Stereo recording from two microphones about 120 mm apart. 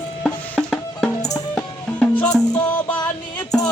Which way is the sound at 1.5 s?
10° left (ahead or behind).